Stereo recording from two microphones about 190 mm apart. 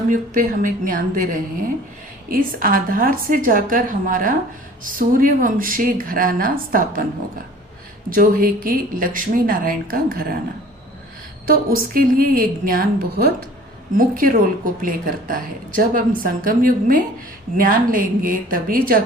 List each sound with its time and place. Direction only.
0.1 s speech: 45° right (ahead or behind)
8.1 s speech: 45° right (ahead or behind)
11.9 s speech: 50° right (ahead or behind)